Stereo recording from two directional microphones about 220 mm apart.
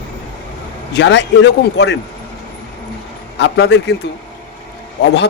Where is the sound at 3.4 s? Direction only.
50° left (ahead or behind).